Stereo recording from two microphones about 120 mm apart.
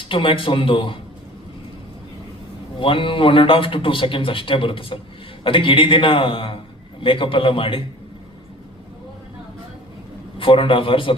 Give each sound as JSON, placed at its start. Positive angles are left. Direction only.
{"t": 0.0, "sound": "a man's voice", "side_deg": 45}
{"t": 2.7, "sound": "a man's voice", "side_deg": 45}
{"t": 10.3, "sound": "a man's voice", "side_deg": 45}